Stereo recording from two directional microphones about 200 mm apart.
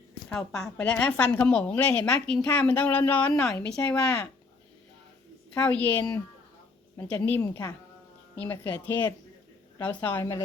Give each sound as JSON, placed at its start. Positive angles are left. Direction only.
{"t": 0.3, "sound": "a woman's voice", "side_deg": 5}
{"t": 3.7, "sound": "a woman's voice", "side_deg": 15}
{"t": 5.5, "sound": "a woman's voice", "side_deg": 5}